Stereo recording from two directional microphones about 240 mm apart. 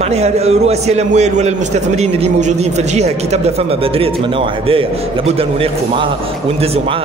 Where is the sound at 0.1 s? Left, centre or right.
Right.